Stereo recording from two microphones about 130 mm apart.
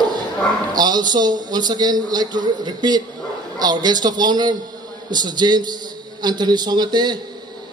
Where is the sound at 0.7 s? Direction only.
30° right (ahead or behind).